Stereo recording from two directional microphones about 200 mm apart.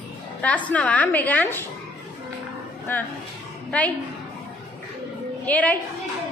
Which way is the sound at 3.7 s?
5° left (ahead or behind).